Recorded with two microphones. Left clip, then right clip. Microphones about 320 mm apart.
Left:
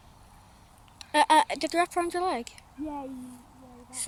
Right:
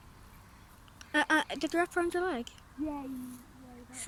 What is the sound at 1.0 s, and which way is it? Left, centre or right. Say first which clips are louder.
Speech: left 7 dB; centre.